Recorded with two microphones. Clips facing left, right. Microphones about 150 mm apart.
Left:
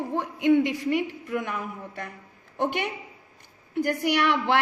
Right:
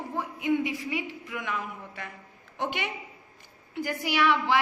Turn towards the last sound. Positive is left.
turn(degrees=65)  # may be behind; listen again after turning